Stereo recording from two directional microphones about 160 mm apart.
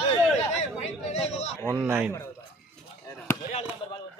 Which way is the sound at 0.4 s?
45° left (ahead or behind).